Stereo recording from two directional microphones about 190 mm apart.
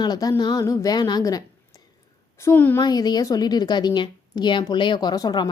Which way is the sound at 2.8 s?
20° left (ahead or behind).